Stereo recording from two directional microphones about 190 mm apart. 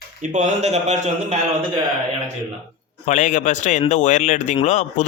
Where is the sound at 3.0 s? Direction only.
40° left (ahead or behind).